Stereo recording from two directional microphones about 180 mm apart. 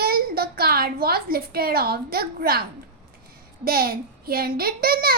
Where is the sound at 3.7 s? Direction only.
55° right (ahead or behind).